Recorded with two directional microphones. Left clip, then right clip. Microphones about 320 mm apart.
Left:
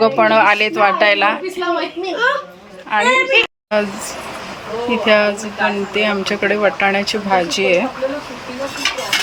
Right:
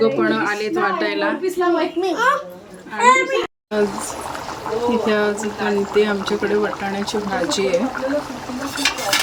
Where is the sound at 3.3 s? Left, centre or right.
Centre.